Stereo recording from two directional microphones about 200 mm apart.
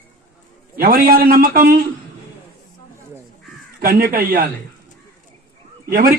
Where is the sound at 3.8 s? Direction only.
45° right (ahead or behind).